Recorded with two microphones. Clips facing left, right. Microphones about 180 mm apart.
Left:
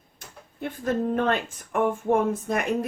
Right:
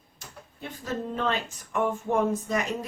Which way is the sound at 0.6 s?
55° left (ahead or behind).